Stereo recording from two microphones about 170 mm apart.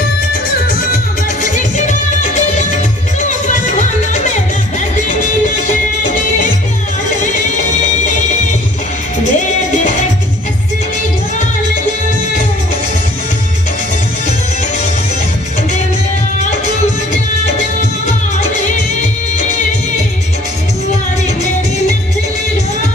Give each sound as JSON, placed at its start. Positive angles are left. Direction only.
{"t": 1.4, "sound": "music", "side_deg": 45}
{"t": 9.2, "sound": "music", "side_deg": 45}